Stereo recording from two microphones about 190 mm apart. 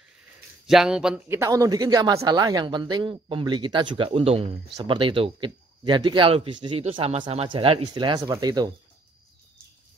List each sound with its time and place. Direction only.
0.7 s a man's voice: 5° right (ahead or behind); by 8.7 s 20° right (ahead or behind)